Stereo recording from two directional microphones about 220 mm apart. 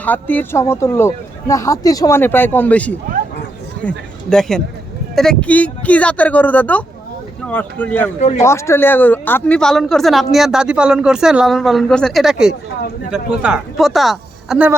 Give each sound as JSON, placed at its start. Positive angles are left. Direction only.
{"t": 0.0, "sound": "speech", "side_deg": 5}
{"t": 8.2, "sound": "a man's voice", "side_deg": 30}
{"t": 8.4, "sound": "speech", "side_deg": 10}